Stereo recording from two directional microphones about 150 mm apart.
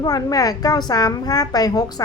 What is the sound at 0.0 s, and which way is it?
A woman's voice, 25° left (ahead or behind).